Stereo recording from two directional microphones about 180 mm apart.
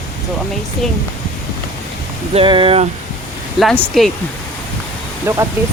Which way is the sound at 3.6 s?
Centre (ahead or behind).